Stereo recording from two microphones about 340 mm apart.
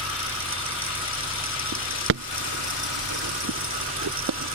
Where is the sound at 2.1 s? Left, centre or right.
Right.